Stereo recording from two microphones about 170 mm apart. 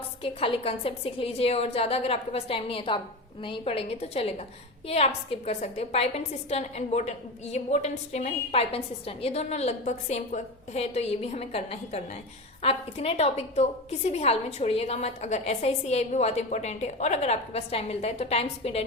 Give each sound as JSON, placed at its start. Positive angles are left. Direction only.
{"t": 0.2, "sound": "a woman's voice", "side_deg": 35}